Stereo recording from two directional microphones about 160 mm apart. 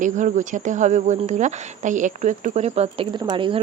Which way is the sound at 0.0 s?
50° right (ahead or behind).